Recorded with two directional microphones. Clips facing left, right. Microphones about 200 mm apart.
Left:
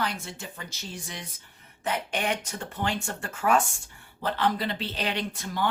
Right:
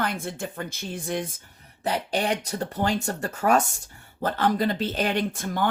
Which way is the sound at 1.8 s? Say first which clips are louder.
Right 4 dB; 35° right (ahead or behind).